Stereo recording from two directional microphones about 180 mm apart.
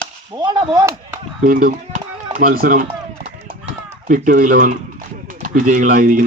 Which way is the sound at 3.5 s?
30° right (ahead or behind).